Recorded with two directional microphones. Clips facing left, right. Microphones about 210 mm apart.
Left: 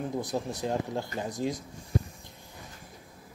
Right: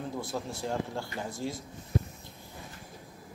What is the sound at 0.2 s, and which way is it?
A woman's voice, 20° left (ahead or behind).